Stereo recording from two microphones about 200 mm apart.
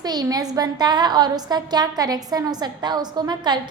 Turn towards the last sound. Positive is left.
turn(degrees=-20)  # may be behind; listen again after turning